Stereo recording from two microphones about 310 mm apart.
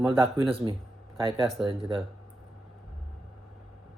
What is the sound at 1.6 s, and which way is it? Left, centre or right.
Speech, centre.